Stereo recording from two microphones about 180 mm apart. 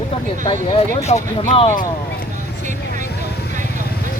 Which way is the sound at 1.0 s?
40° left (ahead or behind).